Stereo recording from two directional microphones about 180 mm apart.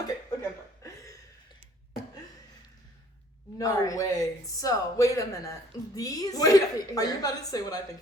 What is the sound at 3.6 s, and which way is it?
A woman's voice, 20° left (ahead or behind).